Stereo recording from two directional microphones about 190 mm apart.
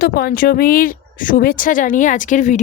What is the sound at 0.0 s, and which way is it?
A woman's voice, 50° left (ahead or behind).